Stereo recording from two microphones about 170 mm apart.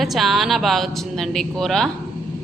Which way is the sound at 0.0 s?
Centre (ahead or behind).